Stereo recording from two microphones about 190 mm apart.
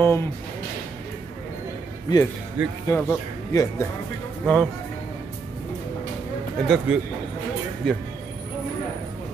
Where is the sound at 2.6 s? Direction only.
10° right (ahead or behind).